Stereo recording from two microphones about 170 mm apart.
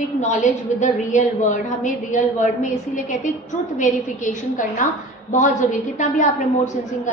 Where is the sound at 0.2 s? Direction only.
45° left (ahead or behind).